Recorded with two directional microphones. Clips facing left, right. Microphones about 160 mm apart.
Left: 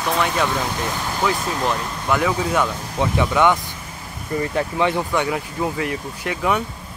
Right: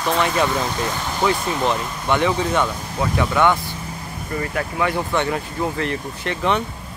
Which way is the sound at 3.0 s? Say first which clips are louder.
Left 1 dB; 20° left (ahead or behind).